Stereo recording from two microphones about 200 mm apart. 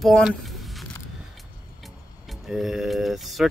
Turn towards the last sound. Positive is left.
turn(degrees=0)  # may be behind; listen again after turning